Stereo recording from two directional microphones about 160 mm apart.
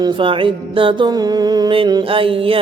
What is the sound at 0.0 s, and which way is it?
Mantra, 30° right (ahead or behind).